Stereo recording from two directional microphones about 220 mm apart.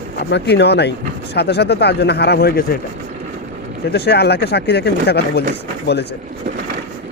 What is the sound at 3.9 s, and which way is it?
Speech, 50° left (ahead or behind).